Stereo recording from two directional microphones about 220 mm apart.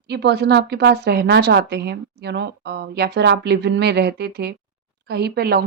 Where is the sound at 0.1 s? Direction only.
50° right (ahead or behind).